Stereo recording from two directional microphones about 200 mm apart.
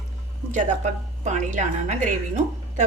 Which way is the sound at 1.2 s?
35° right (ahead or behind).